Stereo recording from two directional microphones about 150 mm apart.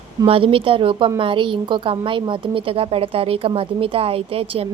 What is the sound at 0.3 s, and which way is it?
A woman's voice, 40° right (ahead or behind).